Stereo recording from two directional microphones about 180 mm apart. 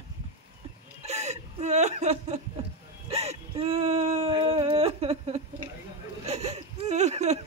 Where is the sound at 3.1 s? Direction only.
35° right (ahead or behind).